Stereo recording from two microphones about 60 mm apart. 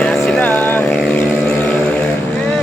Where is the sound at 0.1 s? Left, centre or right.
Centre.